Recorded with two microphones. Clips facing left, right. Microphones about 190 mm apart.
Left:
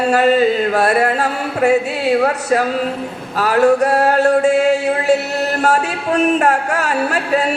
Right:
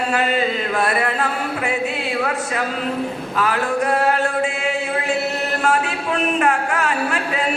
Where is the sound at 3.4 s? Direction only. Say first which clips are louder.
Left 8 dB; 40° left (ahead or behind).